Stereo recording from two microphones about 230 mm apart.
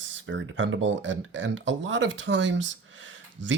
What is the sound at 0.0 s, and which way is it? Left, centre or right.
Speech, right.